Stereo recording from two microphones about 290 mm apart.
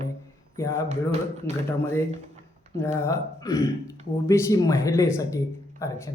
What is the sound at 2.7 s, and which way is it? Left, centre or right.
Speech, centre.